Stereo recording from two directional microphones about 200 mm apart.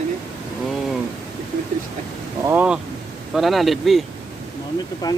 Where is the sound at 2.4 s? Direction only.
5° right (ahead or behind).